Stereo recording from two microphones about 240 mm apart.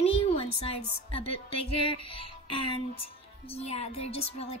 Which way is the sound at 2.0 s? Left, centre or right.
Left.